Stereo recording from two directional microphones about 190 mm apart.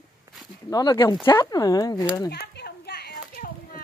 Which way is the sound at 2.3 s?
60° left (ahead or behind).